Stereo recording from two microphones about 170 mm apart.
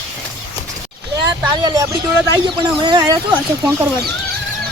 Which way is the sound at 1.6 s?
20° right (ahead or behind).